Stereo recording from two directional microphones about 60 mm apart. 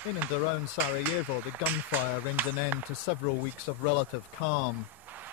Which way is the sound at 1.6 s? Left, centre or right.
Right.